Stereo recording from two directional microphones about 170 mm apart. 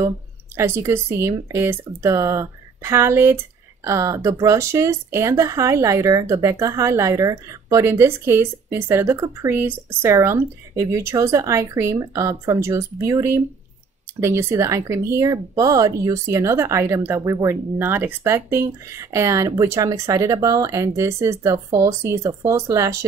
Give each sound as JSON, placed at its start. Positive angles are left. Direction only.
{"t": 0.6, "sound": "speech", "side_deg": -15}